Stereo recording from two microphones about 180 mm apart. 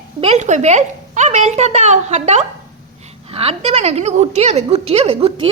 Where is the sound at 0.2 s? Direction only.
40° right (ahead or behind).